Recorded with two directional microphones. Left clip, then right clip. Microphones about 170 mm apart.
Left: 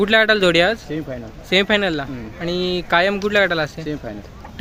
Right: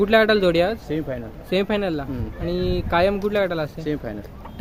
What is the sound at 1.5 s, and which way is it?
Speech, 5° left (ahead or behind).